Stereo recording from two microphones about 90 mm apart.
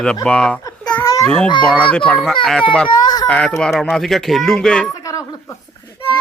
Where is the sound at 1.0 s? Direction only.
35° left (ahead or behind).